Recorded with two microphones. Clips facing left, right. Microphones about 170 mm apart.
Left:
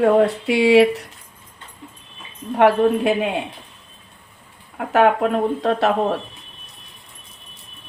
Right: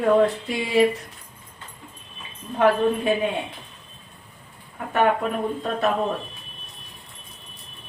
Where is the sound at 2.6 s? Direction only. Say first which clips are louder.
Left 4 dB; 80° left.